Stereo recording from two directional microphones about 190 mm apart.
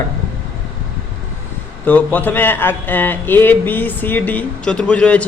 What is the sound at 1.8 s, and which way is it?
A man's voice, 10° left (ahead or behind).